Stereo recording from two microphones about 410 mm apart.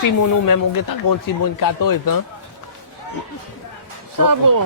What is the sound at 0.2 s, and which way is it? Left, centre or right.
Speech, left.